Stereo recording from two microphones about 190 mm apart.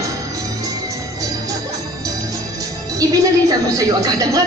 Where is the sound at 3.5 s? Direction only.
20° right (ahead or behind).